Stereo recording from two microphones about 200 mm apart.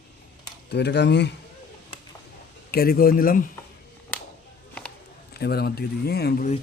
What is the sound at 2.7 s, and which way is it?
Speech, 50° left (ahead or behind).